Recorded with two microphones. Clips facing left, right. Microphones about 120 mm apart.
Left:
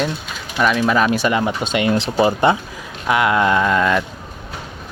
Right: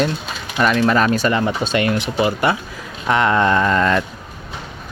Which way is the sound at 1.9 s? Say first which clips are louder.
Left 2 dB; 30° left (ahead or behind).